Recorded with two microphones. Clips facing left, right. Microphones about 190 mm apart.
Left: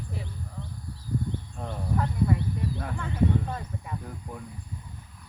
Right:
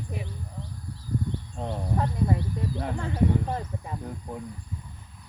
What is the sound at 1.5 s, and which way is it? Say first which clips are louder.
Speech: right 2 dB; 25° right (ahead or behind).